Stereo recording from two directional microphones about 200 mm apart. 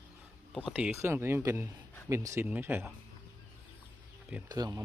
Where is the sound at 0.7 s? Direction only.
5° right (ahead or behind).